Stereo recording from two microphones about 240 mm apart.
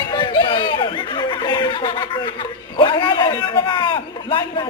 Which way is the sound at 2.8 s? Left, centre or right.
Centre.